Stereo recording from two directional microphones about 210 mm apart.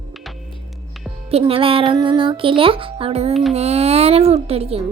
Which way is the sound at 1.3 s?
30° right (ahead or behind).